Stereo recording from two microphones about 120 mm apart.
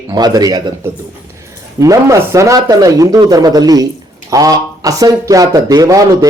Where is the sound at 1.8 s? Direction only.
25° right (ahead or behind).